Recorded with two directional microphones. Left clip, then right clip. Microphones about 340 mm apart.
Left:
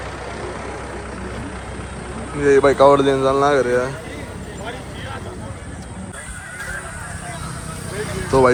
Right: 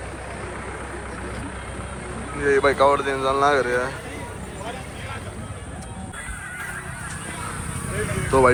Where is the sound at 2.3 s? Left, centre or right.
Centre.